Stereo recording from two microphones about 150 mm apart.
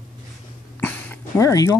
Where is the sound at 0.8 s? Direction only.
15° left (ahead or behind).